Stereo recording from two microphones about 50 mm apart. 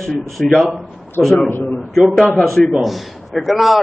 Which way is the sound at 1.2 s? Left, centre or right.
Left.